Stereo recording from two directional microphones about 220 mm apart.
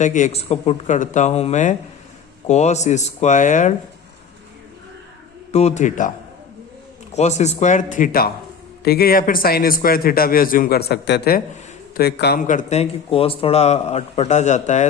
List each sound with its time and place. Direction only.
0.0 s speech: 35° left (ahead or behind)
5.5 s speech: 30° left (ahead or behind)
7.1 s a man's voice: 30° left (ahead or behind)